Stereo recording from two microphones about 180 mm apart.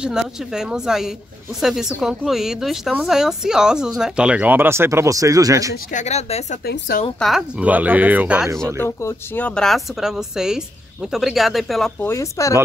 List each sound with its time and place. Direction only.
0.0 s speech: 5° right (ahead or behind)
5.9 s speech: 40° left (ahead or behind)
6.6 s a woman's voice: 60° left (ahead or behind)
7.2 s speech: centre (ahead or behind)
9.0 s speech: 10° left (ahead or behind)
12.0 s speech: 15° left (ahead or behind)